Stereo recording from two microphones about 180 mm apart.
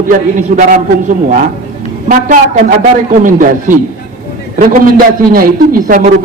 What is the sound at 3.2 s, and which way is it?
A man's voice, 45° right (ahead or behind).